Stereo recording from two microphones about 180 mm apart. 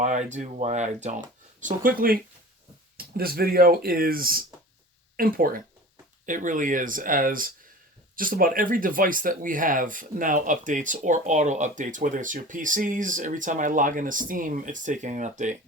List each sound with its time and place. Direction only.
0.0 s speech: 40° right (ahead or behind)
1.6 s speech: 50° right (ahead or behind)